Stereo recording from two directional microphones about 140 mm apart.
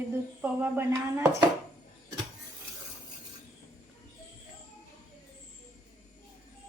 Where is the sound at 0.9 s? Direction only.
25° right (ahead or behind).